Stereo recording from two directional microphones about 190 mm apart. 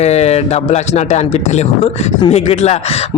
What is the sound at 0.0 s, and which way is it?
Speech, 35° left (ahead or behind).